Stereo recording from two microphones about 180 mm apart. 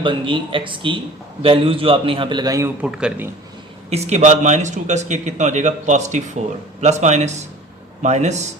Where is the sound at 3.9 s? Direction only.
35° right (ahead or behind).